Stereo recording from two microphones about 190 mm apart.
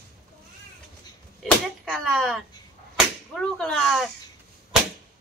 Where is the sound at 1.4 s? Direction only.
Centre (ahead or behind).